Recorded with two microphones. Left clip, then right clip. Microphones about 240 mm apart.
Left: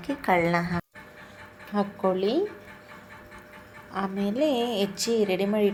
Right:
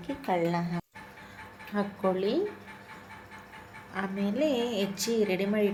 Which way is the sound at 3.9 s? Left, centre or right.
Centre.